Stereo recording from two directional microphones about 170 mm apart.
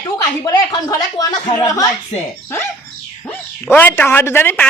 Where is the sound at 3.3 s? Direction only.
10° left (ahead or behind).